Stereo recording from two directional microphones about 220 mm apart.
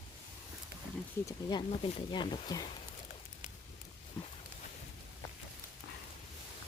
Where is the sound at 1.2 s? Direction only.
15° left (ahead or behind).